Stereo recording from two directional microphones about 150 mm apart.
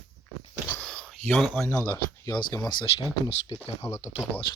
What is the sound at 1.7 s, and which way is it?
Speech, 20° left (ahead or behind).